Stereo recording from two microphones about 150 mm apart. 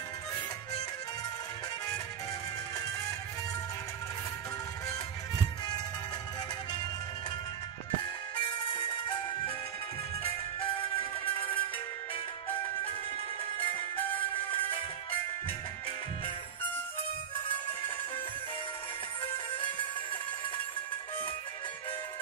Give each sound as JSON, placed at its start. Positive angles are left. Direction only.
{"t": 4.8, "sound": "music", "side_deg": 25}
{"t": 10.2, "sound": "music", "side_deg": 35}
{"t": 13.6, "sound": "music", "side_deg": 35}